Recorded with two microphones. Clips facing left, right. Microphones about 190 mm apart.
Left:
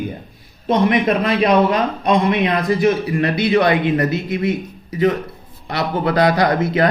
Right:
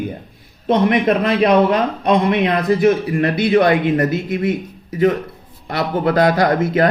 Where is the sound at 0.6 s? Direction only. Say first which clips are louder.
Right 1 dB; 55° right (ahead or behind).